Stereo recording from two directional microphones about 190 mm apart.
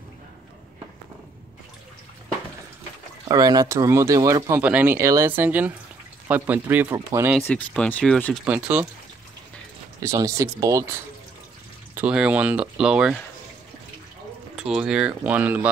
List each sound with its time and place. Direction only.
3.3 s speech: 20° right (ahead or behind)
7.4 s speech: 5° left (ahead or behind)
8.5 s speech: 5° right (ahead or behind)
10.0 s speech: 15° right (ahead or behind)
14.5 s speech: centre (ahead or behind)